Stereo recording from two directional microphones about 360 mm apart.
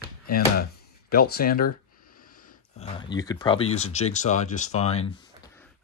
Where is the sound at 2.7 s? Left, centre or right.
Centre.